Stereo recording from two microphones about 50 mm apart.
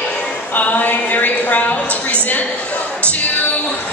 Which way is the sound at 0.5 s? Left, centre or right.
Left.